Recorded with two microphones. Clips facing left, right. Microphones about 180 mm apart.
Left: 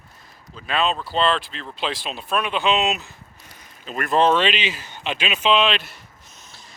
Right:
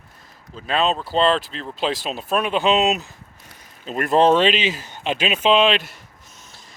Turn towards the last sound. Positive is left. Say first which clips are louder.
# right 3 dB
turn(degrees=-45)  # may be behind; listen again after turning